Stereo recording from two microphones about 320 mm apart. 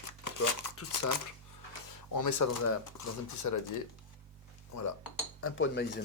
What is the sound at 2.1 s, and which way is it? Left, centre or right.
Speech, left.